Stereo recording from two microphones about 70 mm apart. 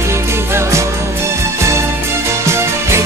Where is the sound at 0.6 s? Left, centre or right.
Right.